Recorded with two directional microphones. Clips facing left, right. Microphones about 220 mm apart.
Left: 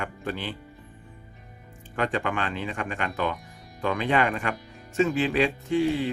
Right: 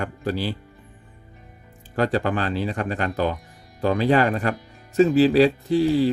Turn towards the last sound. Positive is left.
turn(degrees=-35)  # may be behind; listen again after turning